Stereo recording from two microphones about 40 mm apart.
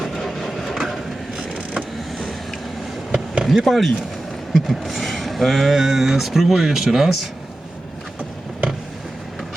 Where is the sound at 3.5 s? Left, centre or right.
Centre.